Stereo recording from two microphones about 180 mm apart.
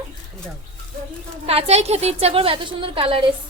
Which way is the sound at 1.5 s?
35° right (ahead or behind).